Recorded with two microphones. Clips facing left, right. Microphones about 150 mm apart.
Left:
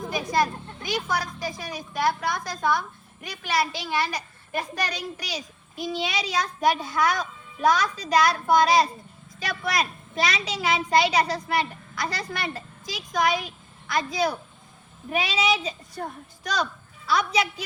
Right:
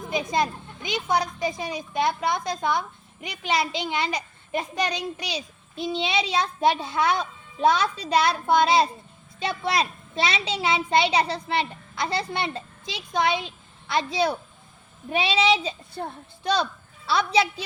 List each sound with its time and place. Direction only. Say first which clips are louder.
0.1 s a child's voice: even; 20° right (ahead or behind)